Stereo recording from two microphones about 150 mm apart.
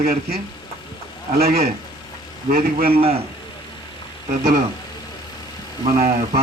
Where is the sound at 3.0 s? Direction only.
40° right (ahead or behind).